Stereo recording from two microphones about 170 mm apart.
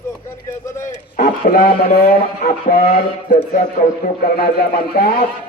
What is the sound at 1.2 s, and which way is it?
Speech, 60° left (ahead or behind).